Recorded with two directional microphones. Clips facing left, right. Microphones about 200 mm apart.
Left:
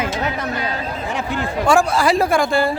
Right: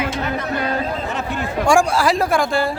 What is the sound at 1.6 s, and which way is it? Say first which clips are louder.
Speech: even; 15° right (ahead or behind).